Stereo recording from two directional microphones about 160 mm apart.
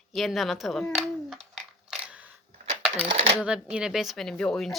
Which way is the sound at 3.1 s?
40° right (ahead or behind).